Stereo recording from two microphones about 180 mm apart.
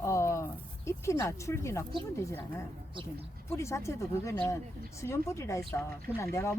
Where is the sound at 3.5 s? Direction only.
15° left (ahead or behind).